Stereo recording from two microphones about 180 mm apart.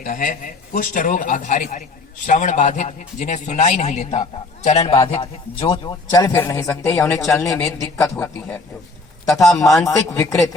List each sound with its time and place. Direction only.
0.0 s a man's voice: 45° left (ahead or behind); by 8.5 s 15° left (ahead or behind)
9.6 s a man's voice: 15° left (ahead or behind)